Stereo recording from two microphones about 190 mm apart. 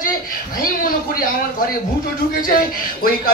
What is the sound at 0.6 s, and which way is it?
Speech, 50° left (ahead or behind).